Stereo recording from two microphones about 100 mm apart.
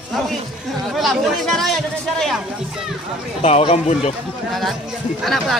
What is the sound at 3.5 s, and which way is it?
Speech, 90° left.